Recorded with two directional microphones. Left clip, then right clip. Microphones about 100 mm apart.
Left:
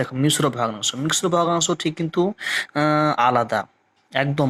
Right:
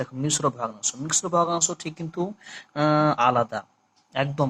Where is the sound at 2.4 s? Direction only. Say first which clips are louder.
Left 6 dB; 50° left (ahead or behind).